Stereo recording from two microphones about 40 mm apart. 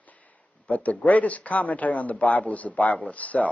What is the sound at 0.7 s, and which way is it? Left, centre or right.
Speech, left.